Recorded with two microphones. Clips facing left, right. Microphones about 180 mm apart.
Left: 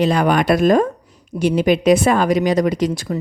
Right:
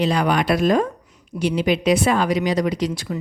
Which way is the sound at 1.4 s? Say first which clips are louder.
Left 4 dB; 50° left (ahead or behind).